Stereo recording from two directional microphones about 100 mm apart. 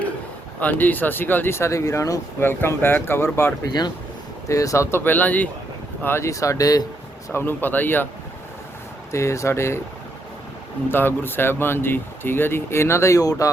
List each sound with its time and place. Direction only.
0.6 s speech: 15° left (ahead or behind); by 2.1 s 35° left (ahead or behind)
2.4 s speech: 20° left (ahead or behind)
3.7 s speech: 45° left (ahead or behind)
4.4 s speech: 35° left (ahead or behind)
7.3 s speech: 20° left (ahead or behind)
9.1 s speech: 30° left (ahead or behind)
10.9 s speech: 20° left (ahead or behind)